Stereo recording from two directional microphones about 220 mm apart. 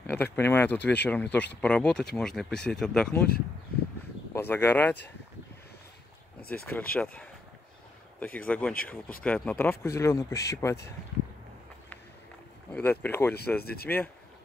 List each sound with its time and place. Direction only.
0.0 s speech: 10° left (ahead or behind)
4.3 s speech: 10° left (ahead or behind)
6.5 s speech: 5° left (ahead or behind)
8.2 s speech: 5° left (ahead or behind)
12.7 s speech: 5° left (ahead or behind)
13.6 s speech: 45° left (ahead or behind)
13.8 s speech: 10° left (ahead or behind)